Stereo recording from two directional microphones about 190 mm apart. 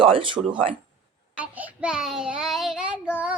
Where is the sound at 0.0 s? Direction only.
25° right (ahead or behind).